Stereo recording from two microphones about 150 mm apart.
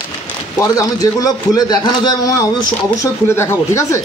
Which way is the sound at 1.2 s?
25° left (ahead or behind).